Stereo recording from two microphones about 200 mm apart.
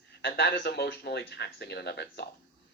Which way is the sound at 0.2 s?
55° left (ahead or behind).